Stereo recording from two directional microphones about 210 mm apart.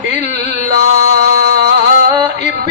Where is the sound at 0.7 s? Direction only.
45° right (ahead or behind).